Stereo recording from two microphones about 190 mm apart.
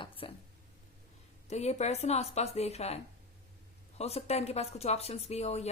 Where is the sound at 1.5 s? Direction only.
35° left (ahead or behind).